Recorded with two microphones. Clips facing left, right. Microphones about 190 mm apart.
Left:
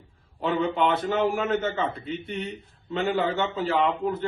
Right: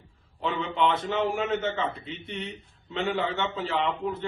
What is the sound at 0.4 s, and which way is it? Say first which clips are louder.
Speech: left 3 dB; 45° left (ahead or behind).